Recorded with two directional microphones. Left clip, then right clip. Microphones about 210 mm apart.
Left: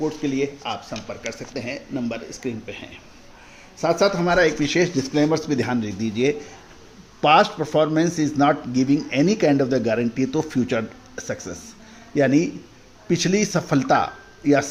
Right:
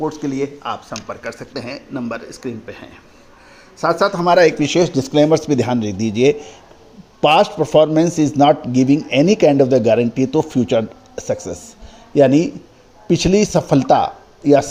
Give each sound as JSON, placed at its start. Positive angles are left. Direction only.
{"t": 0.2, "sound": "speech", "side_deg": -90}
{"t": 0.4, "sound": "speech", "side_deg": -15}
{"t": 3.8, "sound": "speech", "side_deg": -15}
{"t": 4.3, "sound": "a man's voice", "side_deg": -35}